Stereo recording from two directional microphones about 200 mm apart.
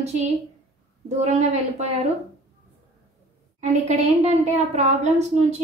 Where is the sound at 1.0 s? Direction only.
35° right (ahead or behind).